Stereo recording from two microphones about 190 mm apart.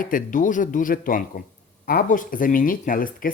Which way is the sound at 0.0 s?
45° left (ahead or behind).